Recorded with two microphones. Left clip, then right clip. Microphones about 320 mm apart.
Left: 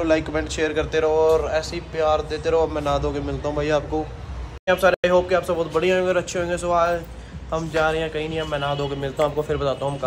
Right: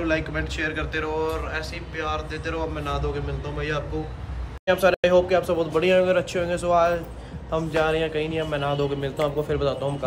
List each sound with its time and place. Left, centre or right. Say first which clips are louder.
0.0 s speech: left 4 dB; centre
4.6 s a man's voice: left 1 dB; centre